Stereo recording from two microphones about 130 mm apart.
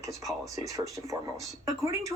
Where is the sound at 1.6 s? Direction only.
25° right (ahead or behind).